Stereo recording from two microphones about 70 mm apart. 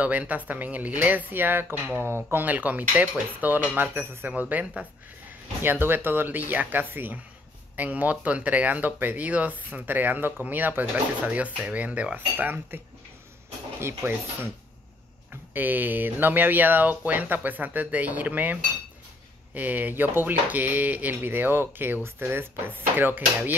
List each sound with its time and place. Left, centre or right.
0.0 s speech: right
2.3 s speech: right
15.5 s speech: right